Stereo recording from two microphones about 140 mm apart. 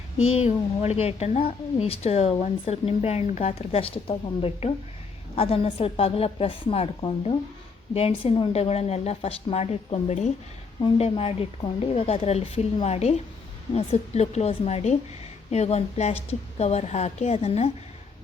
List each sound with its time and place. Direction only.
0.3 s speech: 50° left (ahead or behind)